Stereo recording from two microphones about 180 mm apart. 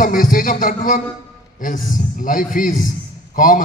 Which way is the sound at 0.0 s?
50° left (ahead or behind).